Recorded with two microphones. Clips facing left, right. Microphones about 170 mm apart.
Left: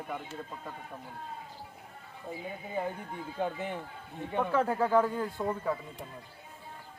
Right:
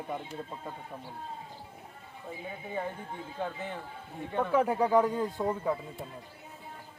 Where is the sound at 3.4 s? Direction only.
15° left (ahead or behind).